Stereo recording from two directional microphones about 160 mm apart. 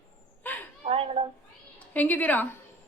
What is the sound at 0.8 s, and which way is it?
Speech, 35° right (ahead or behind).